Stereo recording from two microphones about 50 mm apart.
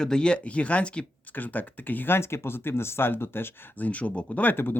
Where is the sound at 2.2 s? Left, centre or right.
Left.